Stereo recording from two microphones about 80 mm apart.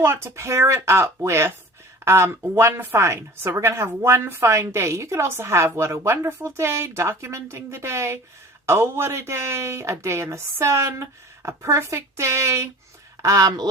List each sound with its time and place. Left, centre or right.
0.0 s speech: right
13.2 s speech: right